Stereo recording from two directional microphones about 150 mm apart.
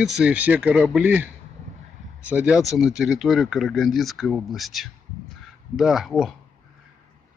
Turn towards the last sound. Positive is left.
turn(degrees=0)  # may be behind; listen again after turning